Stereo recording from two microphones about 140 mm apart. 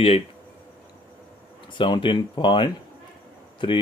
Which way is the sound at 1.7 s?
35° left (ahead or behind).